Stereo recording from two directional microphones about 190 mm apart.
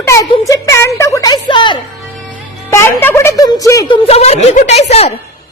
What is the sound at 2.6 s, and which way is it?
A woman's voice, 15° left (ahead or behind).